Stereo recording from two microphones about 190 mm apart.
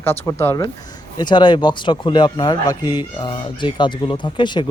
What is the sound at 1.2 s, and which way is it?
Speech, 25° left (ahead or behind).